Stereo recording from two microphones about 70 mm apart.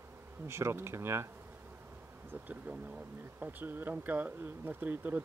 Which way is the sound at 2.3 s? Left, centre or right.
Right.